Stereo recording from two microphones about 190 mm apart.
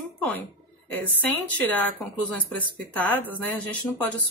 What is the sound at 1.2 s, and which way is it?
Speech, 10° left (ahead or behind).